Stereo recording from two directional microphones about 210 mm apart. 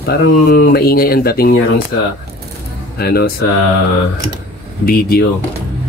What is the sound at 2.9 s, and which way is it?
Speech, 50° left (ahead or behind).